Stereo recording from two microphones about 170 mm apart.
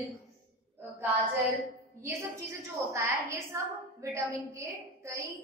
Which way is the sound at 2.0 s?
15° right (ahead or behind).